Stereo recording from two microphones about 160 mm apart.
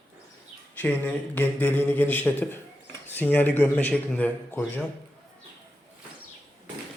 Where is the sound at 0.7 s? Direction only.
10° left (ahead or behind).